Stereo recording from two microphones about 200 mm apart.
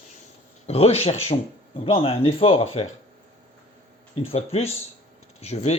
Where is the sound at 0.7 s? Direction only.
30° left (ahead or behind).